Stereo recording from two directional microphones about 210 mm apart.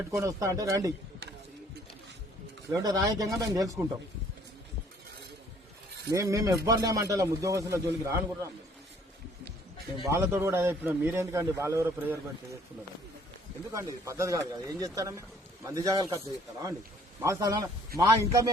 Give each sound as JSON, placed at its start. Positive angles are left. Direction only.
{"t": 0.0, "sound": "a man's voice", "side_deg": -15}
{"t": 2.7, "sound": "a man's voice", "side_deg": -20}
{"t": 6.1, "sound": "a man's voice", "side_deg": -15}
{"t": 10.1, "sound": "a man's voice", "side_deg": -15}
{"t": 13.7, "sound": "a man's voice", "side_deg": -15}